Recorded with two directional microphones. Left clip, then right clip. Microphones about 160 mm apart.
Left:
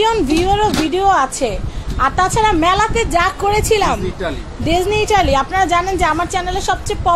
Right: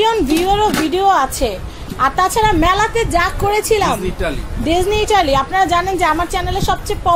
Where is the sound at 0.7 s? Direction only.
30° right (ahead or behind).